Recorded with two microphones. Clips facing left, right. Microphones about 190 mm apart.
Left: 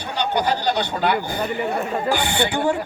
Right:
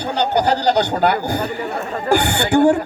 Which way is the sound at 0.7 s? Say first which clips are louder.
Right 5 dB; 45° right (ahead or behind).